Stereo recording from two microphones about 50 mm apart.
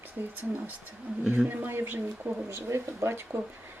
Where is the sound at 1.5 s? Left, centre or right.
Right.